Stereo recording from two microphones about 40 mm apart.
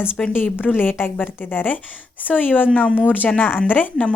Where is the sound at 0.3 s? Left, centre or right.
Left.